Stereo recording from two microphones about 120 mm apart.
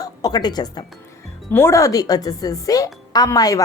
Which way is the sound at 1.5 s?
20° left (ahead or behind).